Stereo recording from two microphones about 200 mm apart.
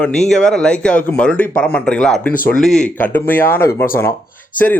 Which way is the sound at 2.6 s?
5° left (ahead or behind).